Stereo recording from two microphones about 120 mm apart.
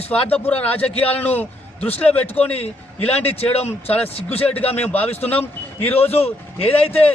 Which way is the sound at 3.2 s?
60° left (ahead or behind).